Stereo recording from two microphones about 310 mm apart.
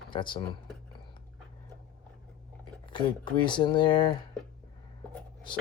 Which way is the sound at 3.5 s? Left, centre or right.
Centre.